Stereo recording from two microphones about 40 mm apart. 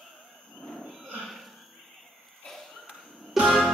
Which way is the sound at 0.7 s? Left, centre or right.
Centre.